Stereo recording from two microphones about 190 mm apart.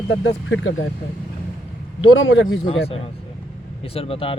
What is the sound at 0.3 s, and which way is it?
Speech, 75° left (ahead or behind).